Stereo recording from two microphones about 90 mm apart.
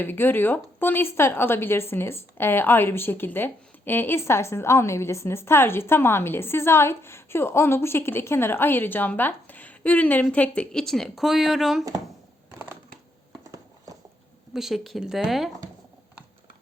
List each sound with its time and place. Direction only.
0.0 s speech: 25° left (ahead or behind); by 11.9 s centre (ahead or behind)
13.4 s horse: 40° right (ahead or behind)
14.5 s speech: 5° right (ahead or behind)